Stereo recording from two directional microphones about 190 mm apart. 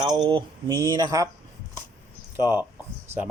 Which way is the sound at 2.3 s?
10° right (ahead or behind).